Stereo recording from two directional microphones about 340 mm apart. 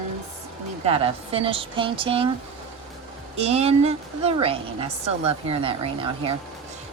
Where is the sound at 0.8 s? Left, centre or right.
Centre.